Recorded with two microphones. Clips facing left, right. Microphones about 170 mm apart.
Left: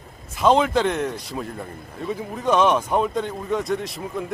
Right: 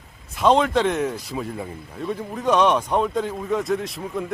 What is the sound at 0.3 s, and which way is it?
A man's voice, centre (ahead or behind).